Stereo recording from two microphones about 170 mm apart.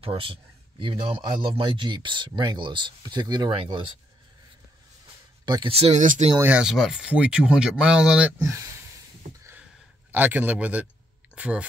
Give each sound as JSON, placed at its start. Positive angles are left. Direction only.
{"t": 0.0, "sound": "a man's voice", "side_deg": -30}
{"t": 5.4, "sound": "speech", "side_deg": -25}
{"t": 6.3, "sound": "speech", "side_deg": -10}
{"t": 10.1, "sound": "a man's voice", "side_deg": -10}